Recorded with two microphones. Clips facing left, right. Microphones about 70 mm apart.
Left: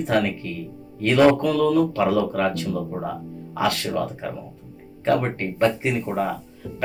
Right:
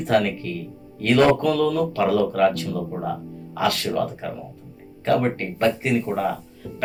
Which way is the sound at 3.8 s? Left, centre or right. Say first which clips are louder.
Right 1 dB; centre.